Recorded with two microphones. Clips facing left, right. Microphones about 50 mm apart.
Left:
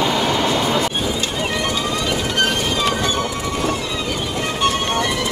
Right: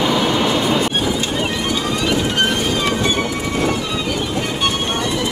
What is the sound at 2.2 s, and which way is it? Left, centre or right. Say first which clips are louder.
Train: right 1 dB; right.